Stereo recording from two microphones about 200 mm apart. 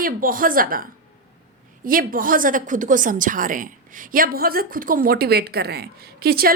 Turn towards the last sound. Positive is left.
turn(degrees=-50)  # may be behind; listen again after turning